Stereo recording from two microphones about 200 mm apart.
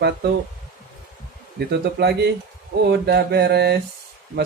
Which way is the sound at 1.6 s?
55° right (ahead or behind).